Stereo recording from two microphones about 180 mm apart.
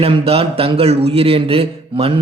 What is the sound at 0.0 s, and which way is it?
A man's voice, 35° right (ahead or behind).